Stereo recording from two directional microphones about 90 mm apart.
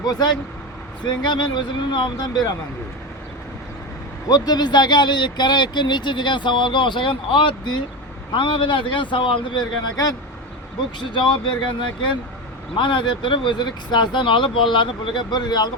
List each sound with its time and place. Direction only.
0.0 s speech: 50° left (ahead or behind)
4.3 s speech: 45° left (ahead or behind)
11.1 s speech: 65° left (ahead or behind)